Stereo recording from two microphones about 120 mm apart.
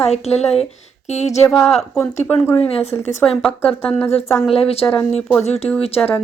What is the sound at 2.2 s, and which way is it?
Speech, 20° left (ahead or behind).